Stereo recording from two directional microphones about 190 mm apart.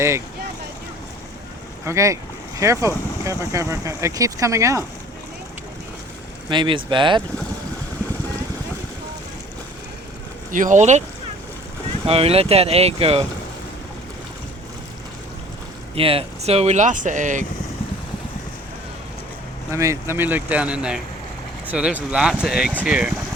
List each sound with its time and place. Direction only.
1.8 s speech: 15° right (ahead or behind)
6.5 s speech: 25° right (ahead or behind)
10.5 s speech: 45° right (ahead or behind)
12.0 s speech: 30° right (ahead or behind)
16.0 s speech: 30° right (ahead or behind)
19.7 s speech: 15° right (ahead or behind)